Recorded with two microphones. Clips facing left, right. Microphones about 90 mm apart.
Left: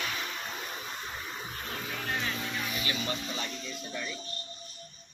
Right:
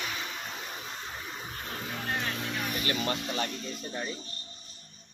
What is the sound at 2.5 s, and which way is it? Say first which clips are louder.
Music: right 2 dB; 50° right (ahead or behind).